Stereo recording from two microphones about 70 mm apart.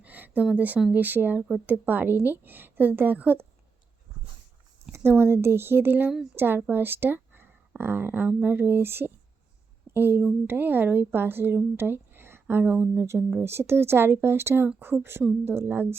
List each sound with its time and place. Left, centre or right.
0.0 s a sound: right
0.5 s speech: right
4.9 s speech: right
12.6 s speech: centre
13.4 s speech: right